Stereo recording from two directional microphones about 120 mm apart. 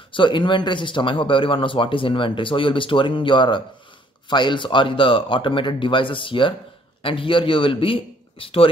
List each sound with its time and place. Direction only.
0.1 s a man's voice: 40° left (ahead or behind)